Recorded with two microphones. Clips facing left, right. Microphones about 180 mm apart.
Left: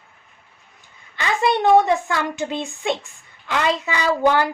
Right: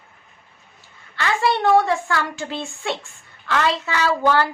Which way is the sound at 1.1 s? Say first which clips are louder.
Left 1 dB; 15° left (ahead or behind).